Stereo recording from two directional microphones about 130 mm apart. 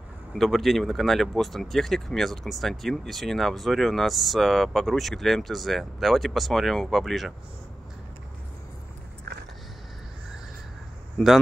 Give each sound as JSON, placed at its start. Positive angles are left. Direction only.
{"t": 0.3, "sound": "speech", "side_deg": 0}
{"t": 11.1, "sound": "speech", "side_deg": 0}